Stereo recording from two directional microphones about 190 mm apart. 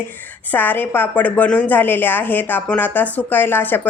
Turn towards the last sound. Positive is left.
turn(degrees=10)  # may be behind; listen again after turning